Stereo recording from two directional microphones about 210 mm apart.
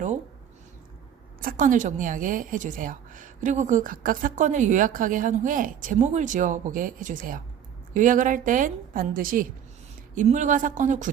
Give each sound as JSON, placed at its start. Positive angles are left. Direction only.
{"t": 1.4, "sound": "a woman's voice", "side_deg": -40}